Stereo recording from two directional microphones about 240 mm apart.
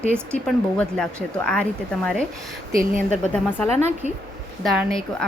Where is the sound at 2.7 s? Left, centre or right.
Right.